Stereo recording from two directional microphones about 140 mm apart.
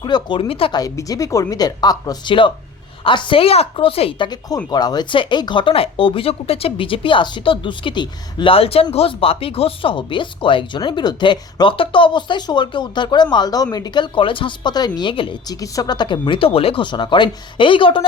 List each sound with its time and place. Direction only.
0.0 s speech: 30° left (ahead or behind)
0.8 s speech: 25° left (ahead or behind); by 4.3 s 40° left (ahead or behind)
4.3 s speech: 30° left (ahead or behind)